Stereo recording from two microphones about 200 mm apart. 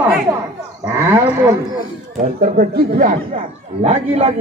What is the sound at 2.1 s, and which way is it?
Speech, 45° right (ahead or behind).